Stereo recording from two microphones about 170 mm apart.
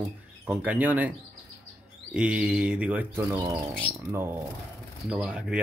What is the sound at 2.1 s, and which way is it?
Speech, 5° right (ahead or behind).